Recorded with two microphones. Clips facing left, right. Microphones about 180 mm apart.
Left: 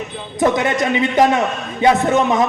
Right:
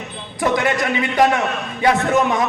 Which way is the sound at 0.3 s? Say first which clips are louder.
Left 2 dB; 20° left (ahead or behind).